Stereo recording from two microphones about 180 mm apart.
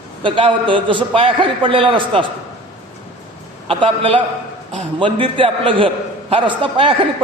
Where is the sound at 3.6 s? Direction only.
30° right (ahead or behind).